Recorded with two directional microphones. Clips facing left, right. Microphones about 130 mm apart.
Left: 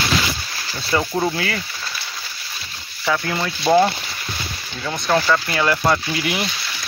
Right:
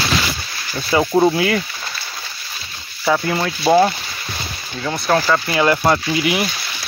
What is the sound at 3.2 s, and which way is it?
Speech, 10° right (ahead or behind).